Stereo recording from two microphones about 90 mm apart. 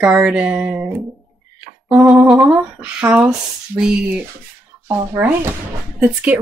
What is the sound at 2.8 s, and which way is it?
Speech, 15° right (ahead or behind).